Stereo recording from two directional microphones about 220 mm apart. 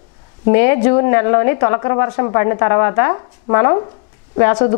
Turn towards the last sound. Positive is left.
turn(degrees=20)  # may be behind; listen again after turning